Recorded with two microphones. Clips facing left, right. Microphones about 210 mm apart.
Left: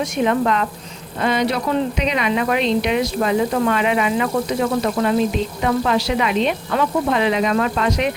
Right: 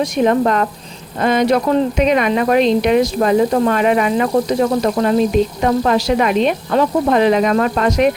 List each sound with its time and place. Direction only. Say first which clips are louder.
0.0 s speech: right 4 dB; 40° right (ahead or behind)